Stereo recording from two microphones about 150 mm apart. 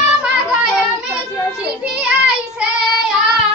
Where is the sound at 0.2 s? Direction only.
5° right (ahead or behind).